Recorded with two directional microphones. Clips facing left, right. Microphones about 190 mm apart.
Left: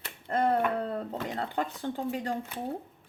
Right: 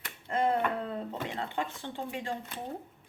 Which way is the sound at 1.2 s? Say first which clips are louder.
Left 3 dB; 40° left (ahead or behind).